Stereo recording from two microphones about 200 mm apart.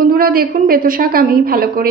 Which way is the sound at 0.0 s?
45° right (ahead or behind).